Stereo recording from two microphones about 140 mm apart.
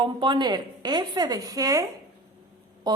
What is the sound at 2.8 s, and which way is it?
Speech, 30° right (ahead or behind).